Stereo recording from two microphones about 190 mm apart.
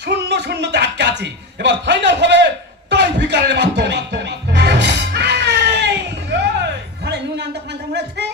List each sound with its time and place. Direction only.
0.0 s speech: 60° right (ahead or behind)
2.9 s music: 60° right (ahead or behind)